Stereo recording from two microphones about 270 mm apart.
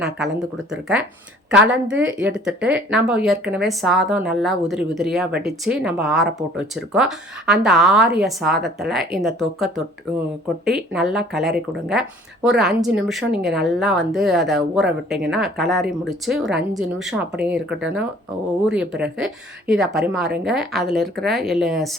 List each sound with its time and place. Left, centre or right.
0.7 s a woman's voice: centre